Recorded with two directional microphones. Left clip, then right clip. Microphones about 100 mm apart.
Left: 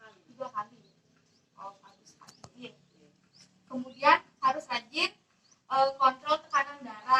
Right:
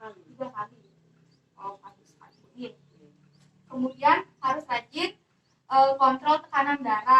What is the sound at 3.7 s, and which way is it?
A child's voice, 25° right (ahead or behind).